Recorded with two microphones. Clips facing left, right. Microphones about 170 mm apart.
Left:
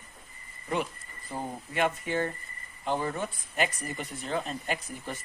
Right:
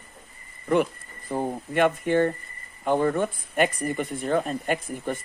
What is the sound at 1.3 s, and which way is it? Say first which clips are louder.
Speech: right 8 dB; 55° right (ahead or behind).